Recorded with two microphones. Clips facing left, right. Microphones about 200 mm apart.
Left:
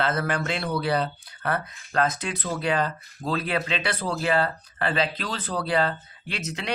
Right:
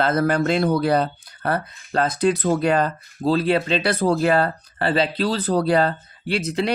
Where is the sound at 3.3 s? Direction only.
30° right (ahead or behind).